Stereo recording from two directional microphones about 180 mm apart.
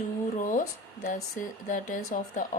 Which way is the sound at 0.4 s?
50° left (ahead or behind).